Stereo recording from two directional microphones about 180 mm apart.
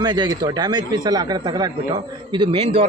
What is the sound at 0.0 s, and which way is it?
Speech, 25° right (ahead or behind).